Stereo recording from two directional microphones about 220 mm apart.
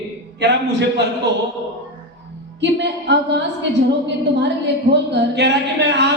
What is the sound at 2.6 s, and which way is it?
Speech, 55° right (ahead or behind).